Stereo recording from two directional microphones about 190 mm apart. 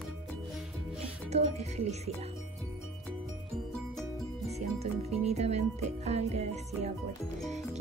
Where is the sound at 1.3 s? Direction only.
35° right (ahead or behind).